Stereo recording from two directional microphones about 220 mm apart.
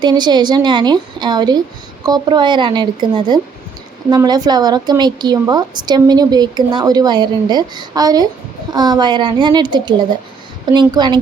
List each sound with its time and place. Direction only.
0.0 s a woman's voice: 20° right (ahead or behind)